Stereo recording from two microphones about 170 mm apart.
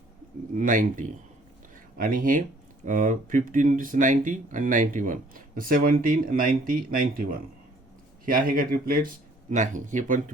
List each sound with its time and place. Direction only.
0.5 s speech: 50° right (ahead or behind)